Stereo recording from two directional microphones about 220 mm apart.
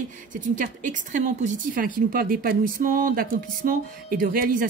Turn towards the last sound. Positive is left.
turn(degrees=-40)  # may be behind; listen again after turning